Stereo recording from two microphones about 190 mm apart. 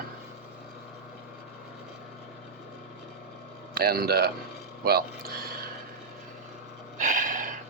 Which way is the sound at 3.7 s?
55° right (ahead or behind).